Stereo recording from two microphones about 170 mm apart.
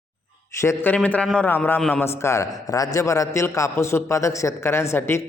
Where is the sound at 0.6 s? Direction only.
15° left (ahead or behind).